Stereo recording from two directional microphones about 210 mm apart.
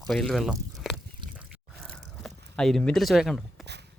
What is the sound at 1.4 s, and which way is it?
Biting, centre (ahead or behind).